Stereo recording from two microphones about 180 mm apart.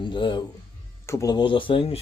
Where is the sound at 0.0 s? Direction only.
25° left (ahead or behind).